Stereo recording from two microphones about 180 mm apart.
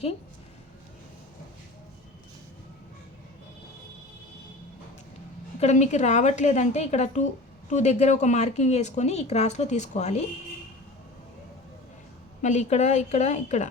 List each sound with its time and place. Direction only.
5.5 s speech: 40° left (ahead or behind)
12.4 s speech: 40° left (ahead or behind)